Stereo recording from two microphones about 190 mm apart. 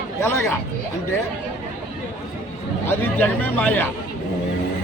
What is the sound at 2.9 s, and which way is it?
Speech, 10° left (ahead or behind).